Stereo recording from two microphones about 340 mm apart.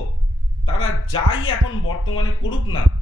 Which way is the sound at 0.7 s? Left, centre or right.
Left.